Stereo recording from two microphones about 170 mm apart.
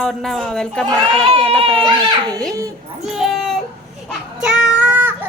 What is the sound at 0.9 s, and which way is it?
A child's voice, 35° right (ahead or behind).